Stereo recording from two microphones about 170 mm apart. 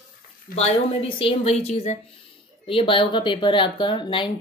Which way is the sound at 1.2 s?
35° left (ahead or behind).